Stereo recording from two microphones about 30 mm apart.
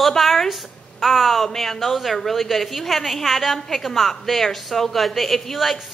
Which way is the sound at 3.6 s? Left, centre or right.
Centre.